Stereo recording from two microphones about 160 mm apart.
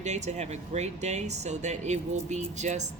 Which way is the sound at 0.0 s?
45° right (ahead or behind).